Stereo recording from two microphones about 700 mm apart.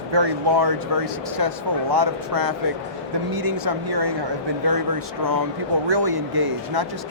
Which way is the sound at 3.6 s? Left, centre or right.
Right.